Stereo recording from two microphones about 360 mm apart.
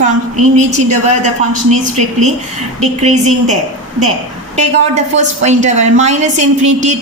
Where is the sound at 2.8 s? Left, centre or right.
Centre.